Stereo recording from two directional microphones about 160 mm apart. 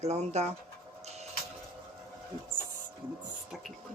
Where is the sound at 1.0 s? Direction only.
45° right (ahead or behind).